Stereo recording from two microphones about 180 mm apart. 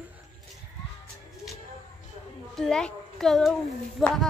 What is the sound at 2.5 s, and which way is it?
A child's voice, 5° left (ahead or behind).